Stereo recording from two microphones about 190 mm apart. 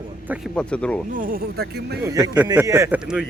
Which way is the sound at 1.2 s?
50° right (ahead or behind).